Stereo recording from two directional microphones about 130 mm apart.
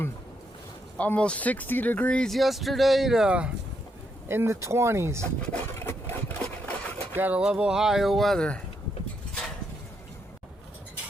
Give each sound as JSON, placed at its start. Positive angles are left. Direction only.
{"t": 0.9, "sound": "speech", "side_deg": 10}
{"t": 4.3, "sound": "speech", "side_deg": -20}
{"t": 5.7, "sound": "sewing machine", "side_deg": 20}
{"t": 6.4, "sound": "a sound", "side_deg": 15}
{"t": 7.2, "sound": "speech", "side_deg": -10}